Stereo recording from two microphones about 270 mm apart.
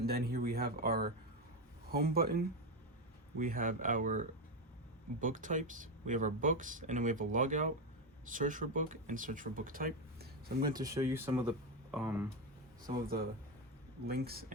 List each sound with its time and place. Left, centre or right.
0.0 s speech: right
10.8 s speech: centre
14.1 s speech: right